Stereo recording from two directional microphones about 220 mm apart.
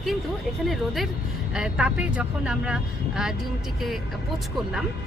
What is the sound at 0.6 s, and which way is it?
Speech, centre (ahead or behind).